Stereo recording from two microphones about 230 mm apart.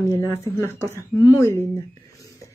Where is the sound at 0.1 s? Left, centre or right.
Centre.